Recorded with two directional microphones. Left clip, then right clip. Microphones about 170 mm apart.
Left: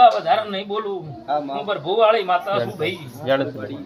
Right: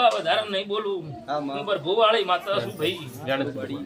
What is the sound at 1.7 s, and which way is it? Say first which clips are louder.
A man's voice: left 3 dB; 15° right (ahead or behind).